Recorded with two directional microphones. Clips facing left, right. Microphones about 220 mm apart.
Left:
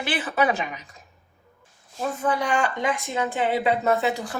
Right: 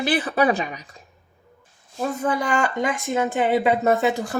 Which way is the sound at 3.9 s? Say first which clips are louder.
Right 3 dB; 45° right (ahead or behind).